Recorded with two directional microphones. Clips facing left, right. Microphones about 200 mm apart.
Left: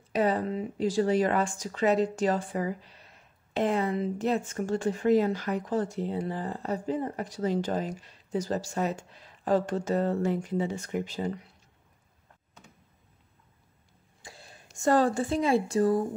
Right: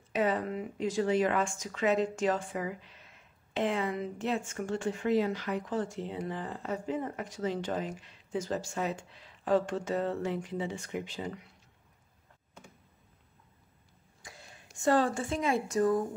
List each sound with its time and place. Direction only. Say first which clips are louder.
0.1 s speech: left 3 dB; 35° left (ahead or behind)
14.2 s speech: left 2 dB; 30° left (ahead or behind)